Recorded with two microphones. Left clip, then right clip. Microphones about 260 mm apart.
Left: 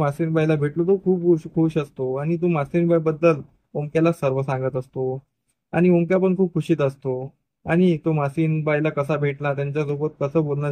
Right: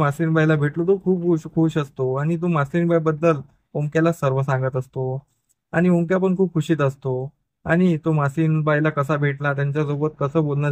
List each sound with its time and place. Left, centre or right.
0.0 s speech: right